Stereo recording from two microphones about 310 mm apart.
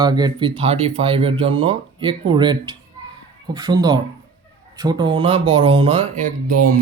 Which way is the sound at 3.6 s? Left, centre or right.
Centre.